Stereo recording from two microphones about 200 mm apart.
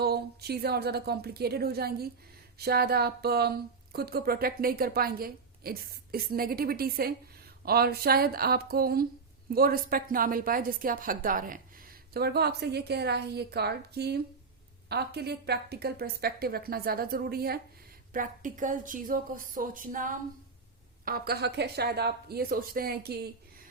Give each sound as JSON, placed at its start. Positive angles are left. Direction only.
{"t": 0.0, "sound": "a woman's voice", "side_deg": -50}